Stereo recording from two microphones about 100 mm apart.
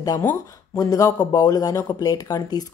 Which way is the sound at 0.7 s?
35° left (ahead or behind).